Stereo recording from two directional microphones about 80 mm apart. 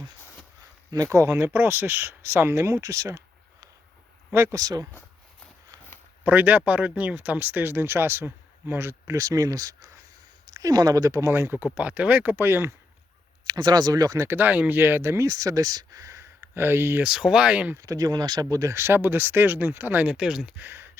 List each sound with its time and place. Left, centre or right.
0.9 s speech: right
4.5 s speech: right
6.2 s speech: right
9.1 s speech: right
11.3 s speech: right
11.6 s speech: centre
13.5 s speech: right
14.3 s speech: right
16.4 s speech: right
17.0 s speech: centre
17.7 s speech: right
20.1 s speech: centre
20.6 s speech: right